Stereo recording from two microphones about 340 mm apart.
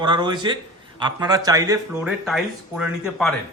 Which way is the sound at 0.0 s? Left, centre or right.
Centre.